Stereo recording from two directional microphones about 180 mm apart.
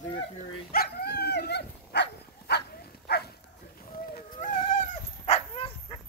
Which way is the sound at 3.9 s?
50° left (ahead or behind).